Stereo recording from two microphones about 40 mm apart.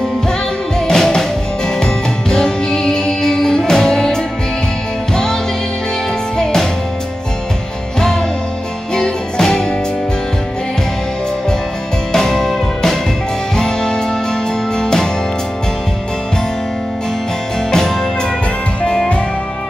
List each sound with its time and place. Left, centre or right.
0.7 s music: centre
8.9 s music: centre
12.1 s music: centre
17.6 s music: centre